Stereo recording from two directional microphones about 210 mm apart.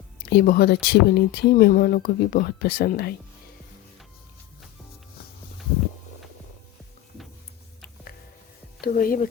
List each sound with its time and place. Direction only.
0.3 s speech: 50° left (ahead or behind)
8.8 s speech: 45° left (ahead or behind)